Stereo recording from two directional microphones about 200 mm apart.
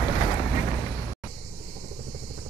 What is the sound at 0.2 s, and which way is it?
Vehicle, 20° left (ahead or behind).